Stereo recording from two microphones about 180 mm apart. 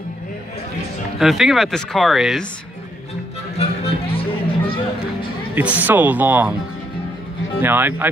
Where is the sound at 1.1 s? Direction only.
Centre (ahead or behind).